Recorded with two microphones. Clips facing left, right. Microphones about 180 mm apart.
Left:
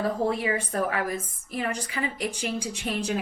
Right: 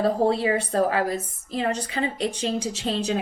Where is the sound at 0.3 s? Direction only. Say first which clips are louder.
Right 4 dB; 25° right (ahead or behind).